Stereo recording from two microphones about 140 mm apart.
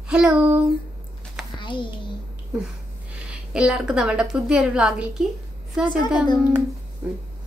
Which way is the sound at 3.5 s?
5° right (ahead or behind).